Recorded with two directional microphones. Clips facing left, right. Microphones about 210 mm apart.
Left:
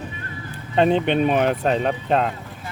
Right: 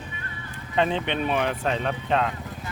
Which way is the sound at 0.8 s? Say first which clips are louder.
Left 7 dB; 40° left (ahead or behind).